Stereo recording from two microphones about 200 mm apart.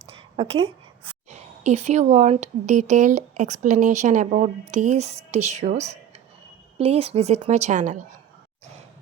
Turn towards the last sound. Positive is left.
turn(degrees=-35)  # may be behind; listen again after turning